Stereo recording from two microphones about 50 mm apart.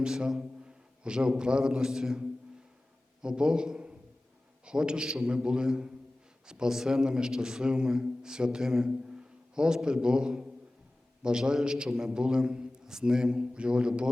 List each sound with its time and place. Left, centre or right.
0.0 s a man's voice: centre